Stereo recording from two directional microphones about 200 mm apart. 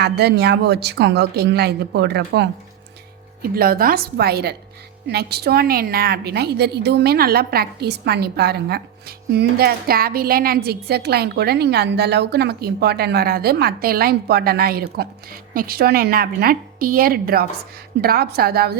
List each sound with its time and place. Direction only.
0.0 s a woman's voice: 55° right (ahead or behind)